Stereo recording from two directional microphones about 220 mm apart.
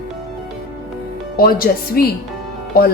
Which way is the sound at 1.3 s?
40° left (ahead or behind).